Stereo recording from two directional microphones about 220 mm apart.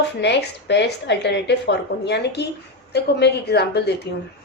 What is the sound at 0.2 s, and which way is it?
A woman's voice, 50° left (ahead or behind).